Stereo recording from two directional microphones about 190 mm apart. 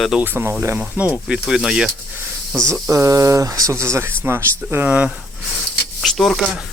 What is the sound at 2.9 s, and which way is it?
Speech, 15° right (ahead or behind).